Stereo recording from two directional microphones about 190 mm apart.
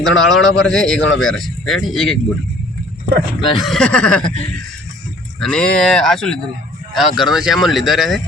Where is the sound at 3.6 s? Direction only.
Centre (ahead or behind).